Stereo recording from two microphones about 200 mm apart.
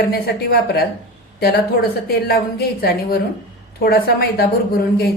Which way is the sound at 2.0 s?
50° left (ahead or behind).